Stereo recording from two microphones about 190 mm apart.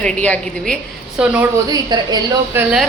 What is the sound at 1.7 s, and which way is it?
Speech, 20° right (ahead or behind).